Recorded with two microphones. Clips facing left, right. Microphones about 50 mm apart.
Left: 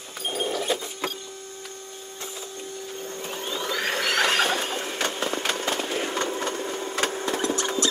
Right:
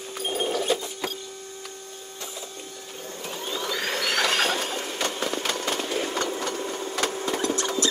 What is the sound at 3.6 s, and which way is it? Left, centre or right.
Vacuum cleaner, left.